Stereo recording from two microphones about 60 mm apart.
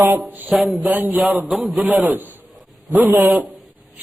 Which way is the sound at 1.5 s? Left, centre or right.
Centre.